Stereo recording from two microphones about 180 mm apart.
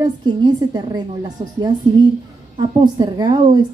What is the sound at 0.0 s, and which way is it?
Speech, 25° right (ahead or behind).